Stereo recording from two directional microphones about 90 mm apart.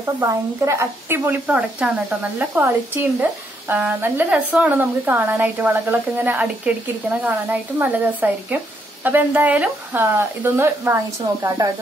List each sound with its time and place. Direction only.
0.0 s a woman's voice: 35° right (ahead or behind)
1.8 s speech: 10° right (ahead or behind)
2.6 s speech: 25° right (ahead or behind)
11.4 s a woman's voice: 40° right (ahead or behind)